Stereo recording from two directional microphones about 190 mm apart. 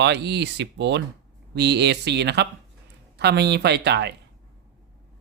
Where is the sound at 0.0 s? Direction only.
65° right (ahead or behind).